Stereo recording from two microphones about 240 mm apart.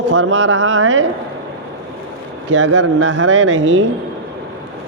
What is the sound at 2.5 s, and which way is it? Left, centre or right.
Speech, right.